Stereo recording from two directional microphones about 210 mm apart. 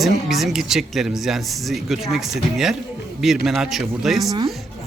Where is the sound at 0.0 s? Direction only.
Centre (ahead or behind).